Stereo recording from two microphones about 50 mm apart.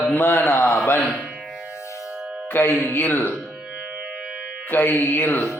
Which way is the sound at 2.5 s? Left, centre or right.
Left.